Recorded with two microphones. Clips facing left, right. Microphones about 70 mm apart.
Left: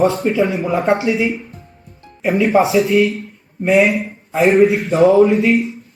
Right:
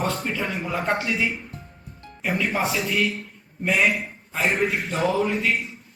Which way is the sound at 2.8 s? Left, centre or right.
Centre.